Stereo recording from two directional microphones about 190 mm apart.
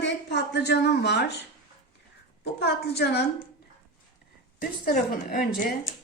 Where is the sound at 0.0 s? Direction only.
65° left (ahead or behind).